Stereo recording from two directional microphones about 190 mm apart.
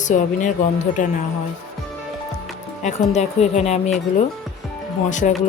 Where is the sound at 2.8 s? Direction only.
35° left (ahead or behind).